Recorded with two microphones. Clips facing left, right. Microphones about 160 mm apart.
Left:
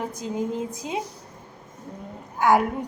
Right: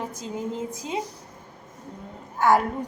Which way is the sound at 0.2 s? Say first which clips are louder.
Left 4 dB; 15° left (ahead or behind).